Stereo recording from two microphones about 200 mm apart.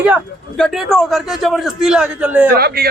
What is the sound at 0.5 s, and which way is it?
A man's voice, centre (ahead or behind).